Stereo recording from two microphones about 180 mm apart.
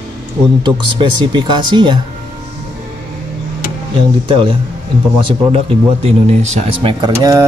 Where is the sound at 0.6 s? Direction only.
25° right (ahead or behind).